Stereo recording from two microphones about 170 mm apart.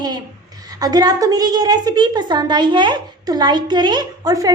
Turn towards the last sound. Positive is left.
turn(degrees=-20)  # may be behind; listen again after turning